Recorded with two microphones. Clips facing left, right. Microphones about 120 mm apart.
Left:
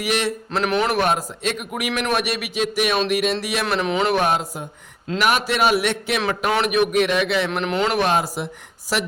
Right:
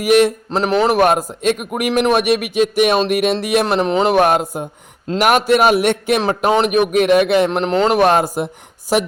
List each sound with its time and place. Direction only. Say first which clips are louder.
0.0 s a man's voice: right 10 dB; 50° right (ahead or behind)
0.6 s speech: right 6 dB; 35° right (ahead or behind)
0.9 s a man's voice: right 6 dB; 50° right (ahead or behind)
3.7 s speech: right 5 dB; 35° right (ahead or behind)
4.1 s a man's voice: right 6 dB; 55° right (ahead or behind)
6.2 s a man's voice: right 4 dB; 40° right (ahead or behind)
7.9 s a man's voice: right 7 dB; 50° right (ahead or behind)